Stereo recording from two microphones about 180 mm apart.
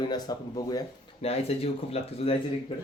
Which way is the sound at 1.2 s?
35° left (ahead or behind).